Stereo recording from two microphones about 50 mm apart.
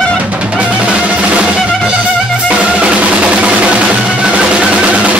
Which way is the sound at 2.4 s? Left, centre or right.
Right.